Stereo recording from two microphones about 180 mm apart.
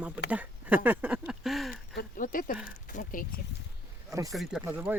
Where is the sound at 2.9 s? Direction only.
45° left (ahead or behind).